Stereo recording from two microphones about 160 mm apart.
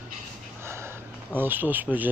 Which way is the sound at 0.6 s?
15° right (ahead or behind).